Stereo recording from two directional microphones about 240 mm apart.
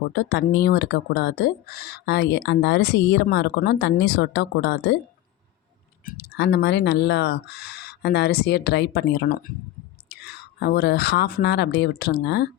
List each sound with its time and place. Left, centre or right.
0.1 s speech: left
6.1 s speech: left